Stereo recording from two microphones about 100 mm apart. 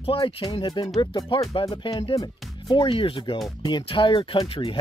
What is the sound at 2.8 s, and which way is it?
Speech, 65° left (ahead or behind).